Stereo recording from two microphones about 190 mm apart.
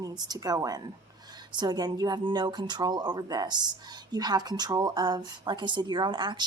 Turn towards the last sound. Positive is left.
turn(degrees=-25)  # may be behind; listen again after turning